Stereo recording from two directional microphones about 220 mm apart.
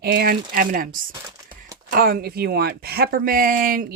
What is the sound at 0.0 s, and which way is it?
Speech, 45° right (ahead or behind).